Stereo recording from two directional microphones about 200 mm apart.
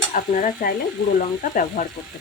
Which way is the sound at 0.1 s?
40° left (ahead or behind).